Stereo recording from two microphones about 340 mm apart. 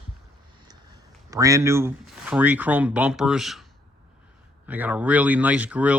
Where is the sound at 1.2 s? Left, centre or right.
Centre.